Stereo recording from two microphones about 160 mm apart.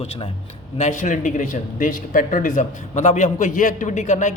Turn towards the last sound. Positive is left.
turn(degrees=50)  # may be behind; listen again after turning